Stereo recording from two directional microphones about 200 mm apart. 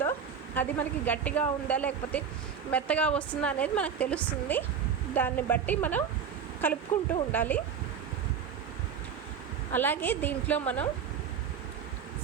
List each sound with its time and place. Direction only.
0.0 s a woman's voice: 10° left (ahead or behind)
9.7 s a woman's voice: 10° left (ahead or behind)